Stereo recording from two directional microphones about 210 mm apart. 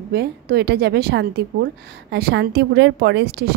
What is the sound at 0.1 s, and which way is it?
A woman's voice, 50° right (ahead or behind).